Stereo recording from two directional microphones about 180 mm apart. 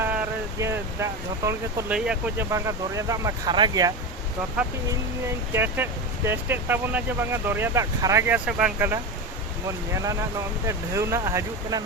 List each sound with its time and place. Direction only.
0.6 s speech: 15° right (ahead or behind)
5.5 s speech: 10° right (ahead or behind)
8.4 s speech: 5° right (ahead or behind)